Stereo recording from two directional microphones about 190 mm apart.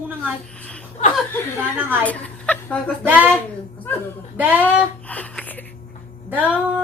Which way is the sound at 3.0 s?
10° right (ahead or behind).